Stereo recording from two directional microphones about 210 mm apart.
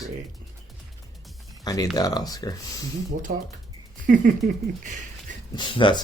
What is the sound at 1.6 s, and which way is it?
Speech, 15° left (ahead or behind).